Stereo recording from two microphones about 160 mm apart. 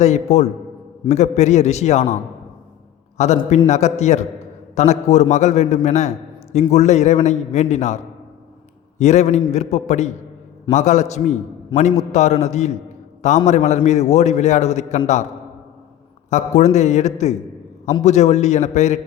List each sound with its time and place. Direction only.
0.0 s a man's voice: 45° left (ahead or behind)
3.2 s a man's voice: 45° left (ahead or behind)
16.3 s a man's voice: 45° left (ahead or behind)